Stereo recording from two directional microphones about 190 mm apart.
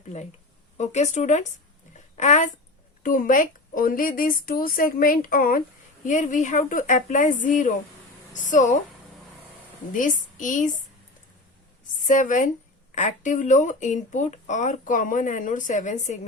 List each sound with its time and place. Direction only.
0.8 s speech: 35° left (ahead or behind)
9.9 s speech: 45° left (ahead or behind)
12.0 s speech: 40° left (ahead or behind)